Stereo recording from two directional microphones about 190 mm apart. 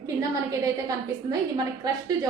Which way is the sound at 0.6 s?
20° right (ahead or behind).